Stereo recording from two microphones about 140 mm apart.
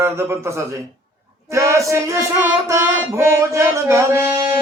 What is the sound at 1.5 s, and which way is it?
Music, 20° right (ahead or behind).